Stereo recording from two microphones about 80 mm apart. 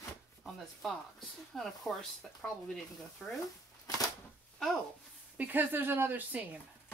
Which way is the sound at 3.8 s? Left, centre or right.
Left.